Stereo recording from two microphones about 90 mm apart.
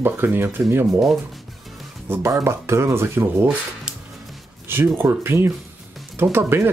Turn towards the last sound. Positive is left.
turn(degrees=-30)  # may be behind; listen again after turning